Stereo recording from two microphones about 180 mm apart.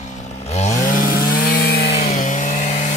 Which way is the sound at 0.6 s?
50° left (ahead or behind).